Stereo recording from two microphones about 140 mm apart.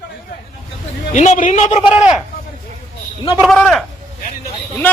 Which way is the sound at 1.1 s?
60° left (ahead or behind).